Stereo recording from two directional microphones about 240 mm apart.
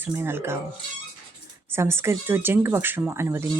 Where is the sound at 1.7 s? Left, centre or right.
Centre.